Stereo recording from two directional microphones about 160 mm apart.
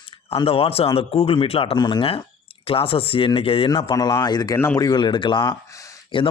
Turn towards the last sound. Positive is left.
turn(degrees=30)  # may be behind; listen again after turning